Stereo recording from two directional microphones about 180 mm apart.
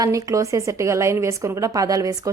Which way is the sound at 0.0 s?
20° right (ahead or behind).